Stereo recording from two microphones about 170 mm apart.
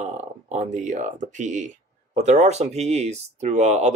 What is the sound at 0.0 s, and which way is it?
Speech, 45° right (ahead or behind).